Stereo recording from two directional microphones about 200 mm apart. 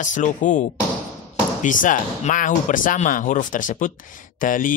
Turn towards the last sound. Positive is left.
turn(degrees=40)  # may be behind; listen again after turning